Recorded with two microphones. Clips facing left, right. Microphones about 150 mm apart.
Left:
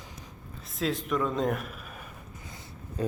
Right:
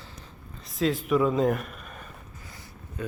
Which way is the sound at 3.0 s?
35° left (ahead or behind).